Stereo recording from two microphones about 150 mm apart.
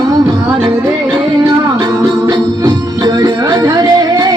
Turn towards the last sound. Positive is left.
turn(degrees=-25)  # may be behind; listen again after turning